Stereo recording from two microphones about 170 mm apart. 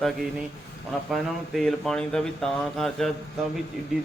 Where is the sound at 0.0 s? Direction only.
Centre (ahead or behind).